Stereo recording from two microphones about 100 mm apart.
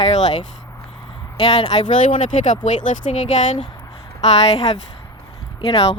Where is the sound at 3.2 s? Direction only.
80° left.